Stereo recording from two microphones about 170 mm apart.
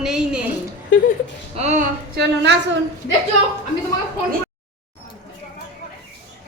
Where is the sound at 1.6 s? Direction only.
40° right (ahead or behind).